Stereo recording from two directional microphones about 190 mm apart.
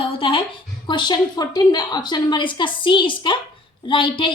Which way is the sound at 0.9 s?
25° left (ahead or behind).